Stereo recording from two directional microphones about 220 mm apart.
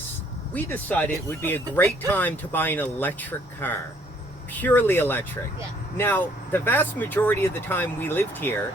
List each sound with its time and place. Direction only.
0.5 s speech: 10° left (ahead or behind)